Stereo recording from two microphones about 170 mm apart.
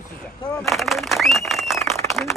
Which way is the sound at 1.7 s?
15° left (ahead or behind).